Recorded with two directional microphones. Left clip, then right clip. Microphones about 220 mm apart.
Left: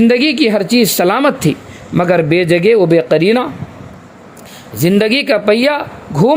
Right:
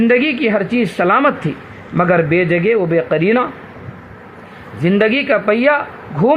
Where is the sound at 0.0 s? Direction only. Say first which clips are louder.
Left 2 dB; 50° left (ahead or behind).